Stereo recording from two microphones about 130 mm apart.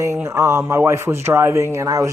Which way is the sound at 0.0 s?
20° right (ahead or behind).